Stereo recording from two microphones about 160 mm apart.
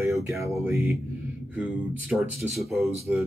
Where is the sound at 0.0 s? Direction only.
20° right (ahead or behind); by 2.9 s centre (ahead or behind).